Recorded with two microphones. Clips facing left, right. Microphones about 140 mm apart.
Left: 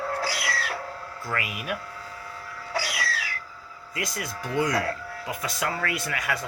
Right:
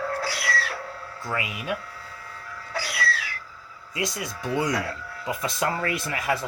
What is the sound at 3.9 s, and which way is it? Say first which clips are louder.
Speech: right 2 dB; 20° right (ahead or behind).